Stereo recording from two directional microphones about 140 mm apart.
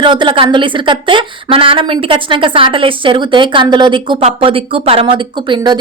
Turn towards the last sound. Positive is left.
turn(degrees=-35)  # may be behind; listen again after turning